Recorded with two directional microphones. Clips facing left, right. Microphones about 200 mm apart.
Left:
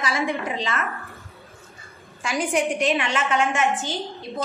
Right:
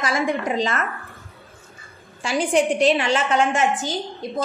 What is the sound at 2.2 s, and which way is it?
A woman's voice, 30° right (ahead or behind).